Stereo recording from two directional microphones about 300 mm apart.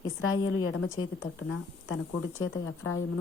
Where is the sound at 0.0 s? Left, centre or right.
Left.